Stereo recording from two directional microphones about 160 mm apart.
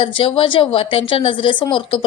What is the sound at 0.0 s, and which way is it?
A woman's voice, 30° left (ahead or behind).